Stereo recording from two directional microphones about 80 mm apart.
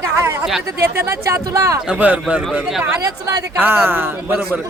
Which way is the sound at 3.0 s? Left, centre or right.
Right.